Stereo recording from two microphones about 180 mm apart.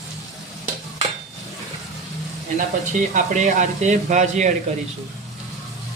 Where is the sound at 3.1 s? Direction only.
45° right (ahead or behind).